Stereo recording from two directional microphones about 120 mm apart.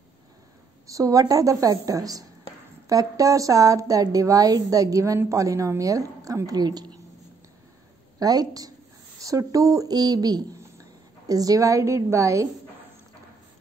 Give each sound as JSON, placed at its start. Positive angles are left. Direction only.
{"t": 0.8, "sound": "a woman's voice", "side_deg": -30}
{"t": 8.2, "sound": "a woman's voice", "side_deg": -30}